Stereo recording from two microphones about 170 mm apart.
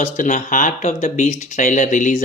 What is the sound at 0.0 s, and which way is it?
Speech, 50° left (ahead or behind).